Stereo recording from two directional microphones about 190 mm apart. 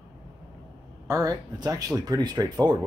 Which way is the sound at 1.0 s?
15° right (ahead or behind).